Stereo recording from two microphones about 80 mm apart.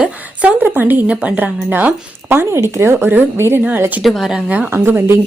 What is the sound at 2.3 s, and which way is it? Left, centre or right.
Speech, right.